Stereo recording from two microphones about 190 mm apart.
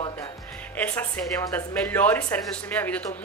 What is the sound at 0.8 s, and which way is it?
Speech, 10° left (ahead or behind).